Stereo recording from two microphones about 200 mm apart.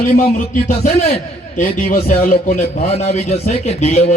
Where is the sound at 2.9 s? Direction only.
30° left (ahead or behind).